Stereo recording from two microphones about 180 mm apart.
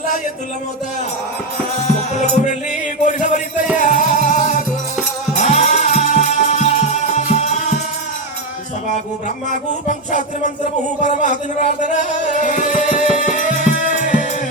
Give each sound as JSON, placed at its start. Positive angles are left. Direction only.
{"t": 2.1, "sound": "music", "side_deg": 40}
{"t": 5.4, "sound": "music", "side_deg": 40}
{"t": 9.5, "sound": "music", "side_deg": 45}